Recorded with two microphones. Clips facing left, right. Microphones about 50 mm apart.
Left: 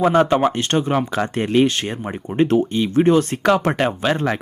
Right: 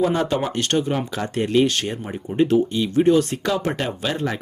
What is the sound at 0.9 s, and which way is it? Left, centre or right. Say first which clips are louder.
Speech: left 4 dB; left.